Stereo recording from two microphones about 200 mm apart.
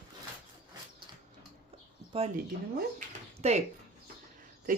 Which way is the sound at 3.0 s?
35° right (ahead or behind).